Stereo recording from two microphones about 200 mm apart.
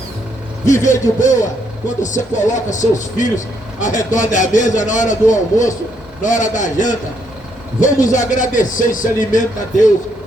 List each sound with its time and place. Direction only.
0.6 s a man's voice: 15° left (ahead or behind)
0.9 s speech: 40° left (ahead or behind)
8.0 s speech: 40° left (ahead or behind)